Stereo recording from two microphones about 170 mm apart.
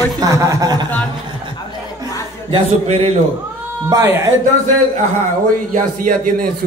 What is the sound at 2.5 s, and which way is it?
Speech, 35° right (ahead or behind).